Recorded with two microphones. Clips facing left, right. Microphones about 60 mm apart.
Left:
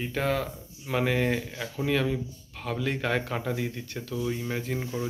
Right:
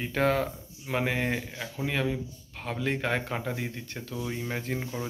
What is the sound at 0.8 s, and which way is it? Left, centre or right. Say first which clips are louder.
Speech: left 3 dB; centre.